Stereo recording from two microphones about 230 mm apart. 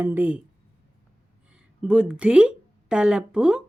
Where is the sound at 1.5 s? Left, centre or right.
Centre.